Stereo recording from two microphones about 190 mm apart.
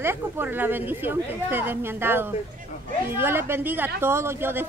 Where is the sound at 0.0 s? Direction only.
10° right (ahead or behind).